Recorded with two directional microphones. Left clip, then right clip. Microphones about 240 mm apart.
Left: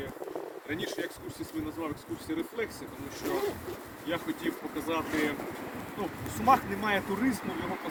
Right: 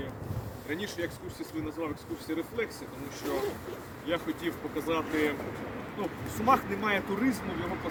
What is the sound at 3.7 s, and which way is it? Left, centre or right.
A woman's voice, centre.